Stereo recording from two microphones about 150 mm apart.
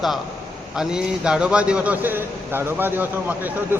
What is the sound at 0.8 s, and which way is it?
A man's voice, 5° right (ahead or behind).